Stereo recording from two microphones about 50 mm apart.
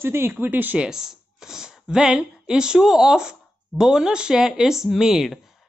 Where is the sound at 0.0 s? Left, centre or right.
Right.